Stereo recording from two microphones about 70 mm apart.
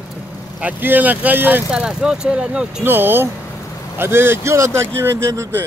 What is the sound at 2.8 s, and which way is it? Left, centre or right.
Speech, right.